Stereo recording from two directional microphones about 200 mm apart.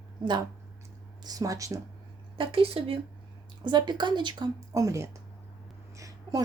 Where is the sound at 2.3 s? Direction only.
25° right (ahead or behind).